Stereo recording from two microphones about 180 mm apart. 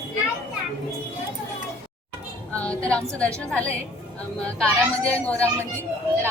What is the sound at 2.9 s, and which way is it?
Speech, 5° left (ahead or behind).